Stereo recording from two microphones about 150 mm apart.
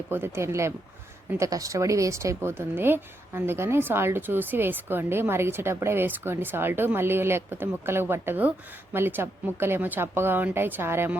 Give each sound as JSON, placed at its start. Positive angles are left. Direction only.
{"t": 0.1, "sound": "speech", "side_deg": -15}